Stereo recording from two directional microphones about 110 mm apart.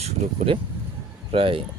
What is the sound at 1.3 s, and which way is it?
Speech, 55° right (ahead or behind).